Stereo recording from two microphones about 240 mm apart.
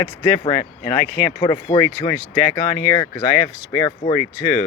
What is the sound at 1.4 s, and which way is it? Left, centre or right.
Speech, centre.